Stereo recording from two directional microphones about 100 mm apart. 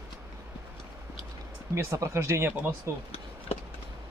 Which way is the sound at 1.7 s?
30° right (ahead or behind).